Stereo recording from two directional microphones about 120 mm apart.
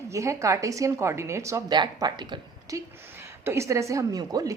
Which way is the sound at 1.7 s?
35° right (ahead or behind).